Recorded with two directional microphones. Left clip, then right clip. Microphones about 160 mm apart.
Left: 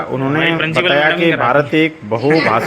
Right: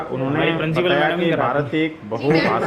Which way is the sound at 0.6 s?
10° right (ahead or behind).